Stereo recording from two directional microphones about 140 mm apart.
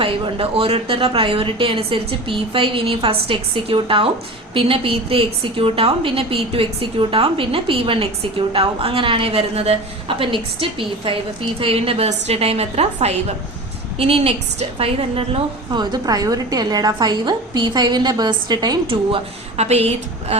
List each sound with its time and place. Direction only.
0.0 s a woman's voice: 40° right (ahead or behind)